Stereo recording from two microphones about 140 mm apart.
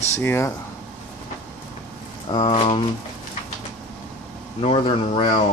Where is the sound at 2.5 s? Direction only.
35° left (ahead or behind).